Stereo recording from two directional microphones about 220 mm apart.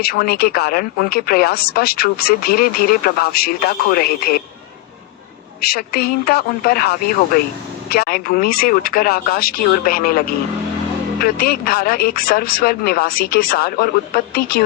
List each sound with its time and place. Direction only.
0.0 s speech: 45° left (ahead or behind)
5.5 s speech: 45° left (ahead or behind)